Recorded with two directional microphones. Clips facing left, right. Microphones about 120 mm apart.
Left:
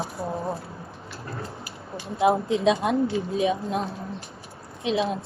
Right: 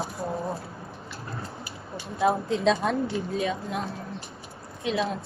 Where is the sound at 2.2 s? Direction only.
15° left (ahead or behind).